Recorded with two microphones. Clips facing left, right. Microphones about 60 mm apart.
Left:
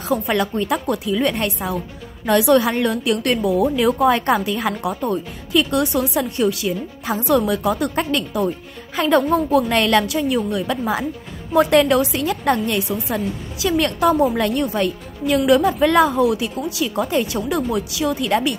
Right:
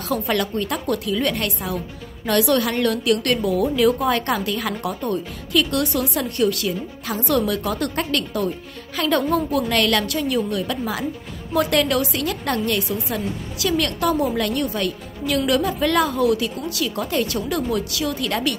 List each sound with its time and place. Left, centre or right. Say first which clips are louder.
0.0 s a woman's voice: left 2 dB; left